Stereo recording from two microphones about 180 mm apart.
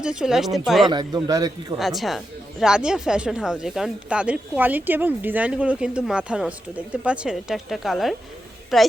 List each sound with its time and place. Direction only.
0.0 s speech: 5° right (ahead or behind)
0.9 s speech: 25° right (ahead or behind)
1.8 s speech: centre (ahead or behind)